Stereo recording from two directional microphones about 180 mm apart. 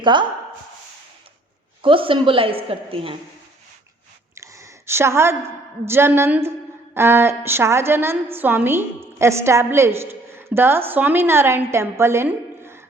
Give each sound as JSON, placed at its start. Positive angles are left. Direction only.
{"t": 0.0, "sound": "speech", "side_deg": -25}
{"t": 1.8, "sound": "a woman's voice", "side_deg": -30}
{"t": 4.4, "sound": "a woman's voice", "side_deg": -15}